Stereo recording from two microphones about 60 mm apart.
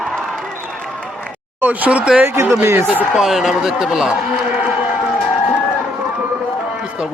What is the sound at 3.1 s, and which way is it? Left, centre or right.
Speech, centre.